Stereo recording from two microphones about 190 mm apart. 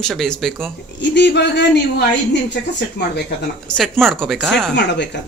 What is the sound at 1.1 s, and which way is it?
Speech, 65° left (ahead or behind).